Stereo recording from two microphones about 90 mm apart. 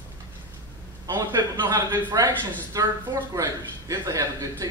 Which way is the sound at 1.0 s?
45° right (ahead or behind).